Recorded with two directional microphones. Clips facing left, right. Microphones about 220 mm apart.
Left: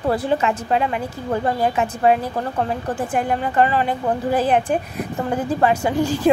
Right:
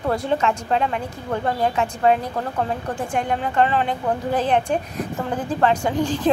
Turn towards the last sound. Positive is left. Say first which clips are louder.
# left 2 dB
turn(degrees=10)  # may be behind; listen again after turning